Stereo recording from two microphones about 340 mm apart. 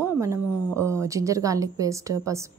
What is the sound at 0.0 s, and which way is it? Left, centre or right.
A woman's voice, centre.